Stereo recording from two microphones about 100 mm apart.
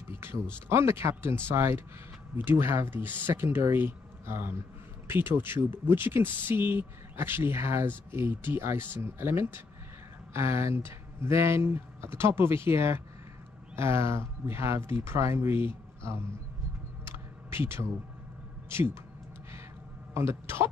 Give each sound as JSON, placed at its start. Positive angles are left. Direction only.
{"t": 0.1, "sound": "speech", "side_deg": -25}
{"t": 17.0, "sound": "a sound", "side_deg": -25}
{"t": 18.7, "sound": "speech", "side_deg": -25}
{"t": 20.2, "sound": "speech", "side_deg": -25}